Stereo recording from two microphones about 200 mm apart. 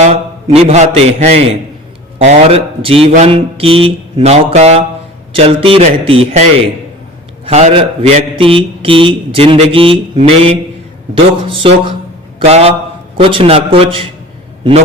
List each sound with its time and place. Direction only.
0.0 s a man's voice: 30° right (ahead or behind)
3.1 s mantra: 30° right (ahead or behind)
5.4 s a man's voice: 30° right (ahead or behind)
7.4 s a man's voice: 30° right (ahead or behind)
12.5 s mantra: 30° right (ahead or behind)
13.1 s a man's voice: 25° right (ahead or behind)